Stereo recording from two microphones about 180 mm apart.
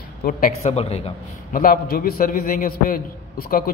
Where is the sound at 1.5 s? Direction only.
50° left (ahead or behind).